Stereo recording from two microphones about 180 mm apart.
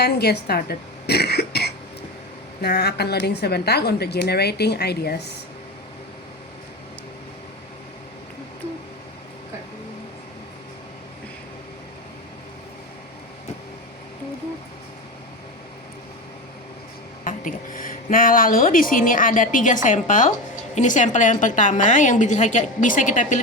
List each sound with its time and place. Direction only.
0.0 s a woman's voice: 65° left (ahead or behind)
17.2 s a woman's voice: 50° left (ahead or behind)